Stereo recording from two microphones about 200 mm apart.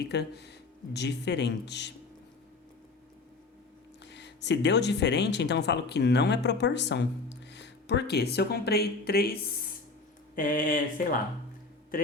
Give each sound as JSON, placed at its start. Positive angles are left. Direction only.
{"t": 0.0, "sound": "speech", "side_deg": 55}
{"t": 4.0, "sound": "speech", "side_deg": 60}